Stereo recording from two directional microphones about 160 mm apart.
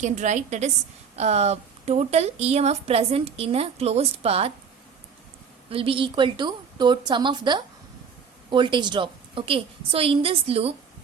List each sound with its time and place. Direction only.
0.0 s a woman's voice: 50° right (ahead or behind)
5.7 s a woman's voice: 35° right (ahead or behind)